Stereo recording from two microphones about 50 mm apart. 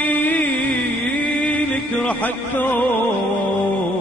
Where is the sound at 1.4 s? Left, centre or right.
Left.